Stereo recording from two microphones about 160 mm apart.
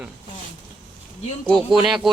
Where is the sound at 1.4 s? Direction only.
5° left (ahead or behind).